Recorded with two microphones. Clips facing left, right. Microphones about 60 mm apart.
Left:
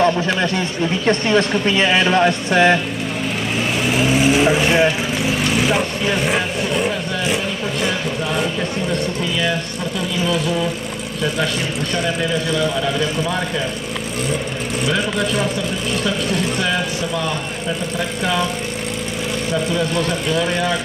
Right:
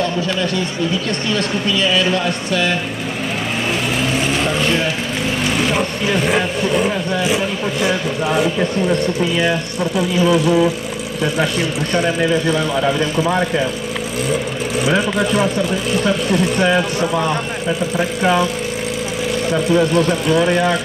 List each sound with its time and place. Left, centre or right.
1.0 s speech: left
4.0 s vehicle: centre
4.8 s speech: centre
9.4 s speech: centre
11.9 s speech: centre
12.4 s speech: right
14.9 s speech: centre
16.5 s speech: centre
19.5 s speech: centre